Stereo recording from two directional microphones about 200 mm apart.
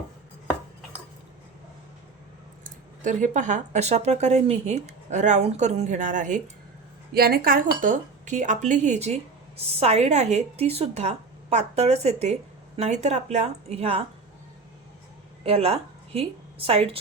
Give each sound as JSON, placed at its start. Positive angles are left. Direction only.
{"t": 2.6, "sound": "a woman's voice", "side_deg": -40}
{"t": 7.1, "sound": "a woman's voice", "side_deg": -50}
{"t": 15.4, "sound": "a woman's voice", "side_deg": -30}